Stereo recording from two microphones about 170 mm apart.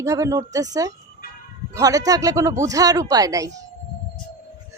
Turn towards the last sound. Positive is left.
turn(degrees=-20)  # may be behind; listen again after turning